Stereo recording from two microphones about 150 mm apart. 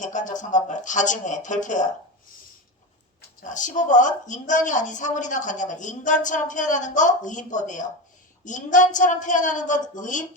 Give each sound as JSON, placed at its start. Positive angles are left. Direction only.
{"t": 0.0, "sound": "a woman's voice", "side_deg": 55}
{"t": 3.4, "sound": "a woman's voice", "side_deg": 55}